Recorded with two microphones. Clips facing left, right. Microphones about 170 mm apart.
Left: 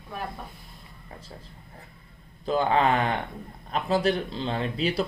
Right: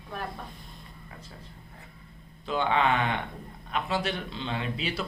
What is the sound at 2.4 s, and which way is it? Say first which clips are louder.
Speech: left 3 dB; 40° left (ahead or behind).